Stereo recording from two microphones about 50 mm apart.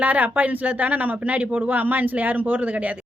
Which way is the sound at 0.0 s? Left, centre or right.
Right.